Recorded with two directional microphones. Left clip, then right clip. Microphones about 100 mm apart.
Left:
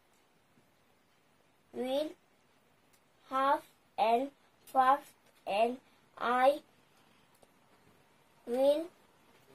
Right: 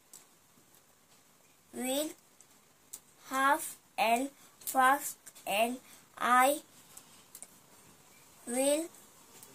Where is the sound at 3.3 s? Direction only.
5° right (ahead or behind).